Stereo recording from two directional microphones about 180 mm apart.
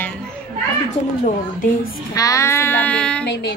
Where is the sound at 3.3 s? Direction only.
70° left (ahead or behind).